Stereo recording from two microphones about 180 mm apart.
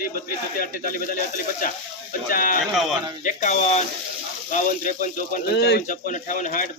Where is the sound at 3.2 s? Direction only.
45° left (ahead or behind).